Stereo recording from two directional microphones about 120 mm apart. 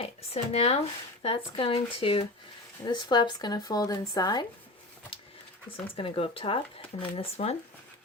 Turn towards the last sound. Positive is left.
turn(degrees=55)  # may be behind; listen again after turning